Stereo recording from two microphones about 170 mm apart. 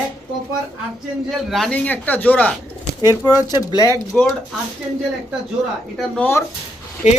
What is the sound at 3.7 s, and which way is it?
Speech, 20° right (ahead or behind).